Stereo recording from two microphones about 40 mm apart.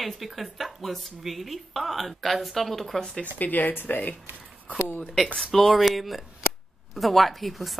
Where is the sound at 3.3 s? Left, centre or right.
Left.